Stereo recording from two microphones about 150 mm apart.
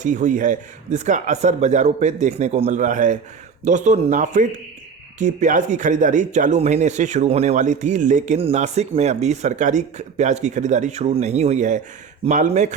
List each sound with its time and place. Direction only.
0.0 s speech: 55° right (ahead or behind)
8.4 s speech: 45° right (ahead or behind)